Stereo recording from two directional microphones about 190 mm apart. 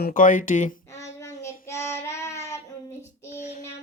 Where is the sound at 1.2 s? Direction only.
15° left (ahead or behind).